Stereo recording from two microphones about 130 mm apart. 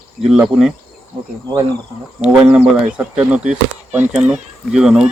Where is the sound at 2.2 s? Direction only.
5° right (ahead or behind).